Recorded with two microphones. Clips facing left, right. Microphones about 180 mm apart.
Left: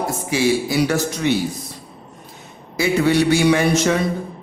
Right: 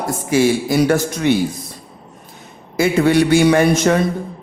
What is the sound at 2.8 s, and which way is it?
Speech, 50° right (ahead or behind).